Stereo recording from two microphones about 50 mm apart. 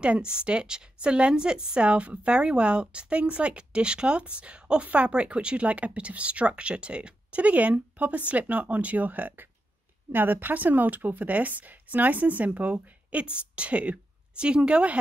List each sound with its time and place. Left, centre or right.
0.0 s a woman's voice: right